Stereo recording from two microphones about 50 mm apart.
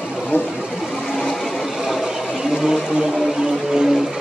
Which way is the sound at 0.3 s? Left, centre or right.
Left.